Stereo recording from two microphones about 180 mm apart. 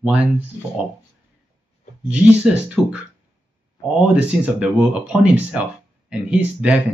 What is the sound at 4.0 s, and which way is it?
Speech, 5° right (ahead or behind).